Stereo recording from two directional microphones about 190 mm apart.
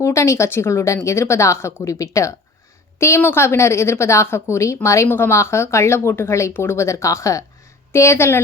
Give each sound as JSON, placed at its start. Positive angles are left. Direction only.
{"t": 0.0, "sound": "a woman's voice", "side_deg": 15}